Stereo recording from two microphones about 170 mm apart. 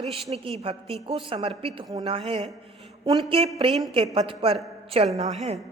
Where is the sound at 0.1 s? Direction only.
35° right (ahead or behind).